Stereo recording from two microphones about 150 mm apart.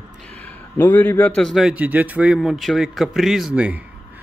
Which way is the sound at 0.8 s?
10° left (ahead or behind).